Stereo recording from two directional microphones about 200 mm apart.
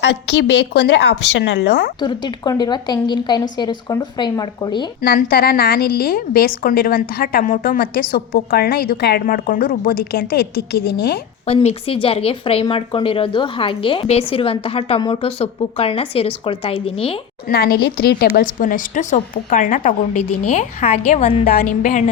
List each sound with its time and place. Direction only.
0.0 s a woman's voice: 60° left (ahead or behind)
2.0 s speech: 20° left (ahead or behind)
5.0 s a woman's voice: 50° left (ahead or behind)
11.4 s speech: 30° left (ahead or behind)
17.5 s a woman's voice: 50° left (ahead or behind); by 21.3 s 30° left (ahead or behind)
21.4 s a woman's voice: 45° left (ahead or behind)